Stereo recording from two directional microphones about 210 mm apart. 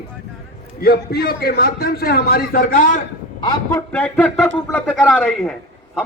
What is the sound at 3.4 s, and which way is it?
Speech, 20° left (ahead or behind).